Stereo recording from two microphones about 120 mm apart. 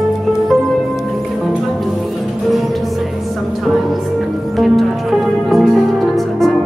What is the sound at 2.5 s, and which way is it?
Music, centre (ahead or behind).